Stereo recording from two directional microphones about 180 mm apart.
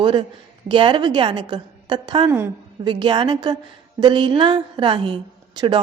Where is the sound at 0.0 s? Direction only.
25° right (ahead or behind).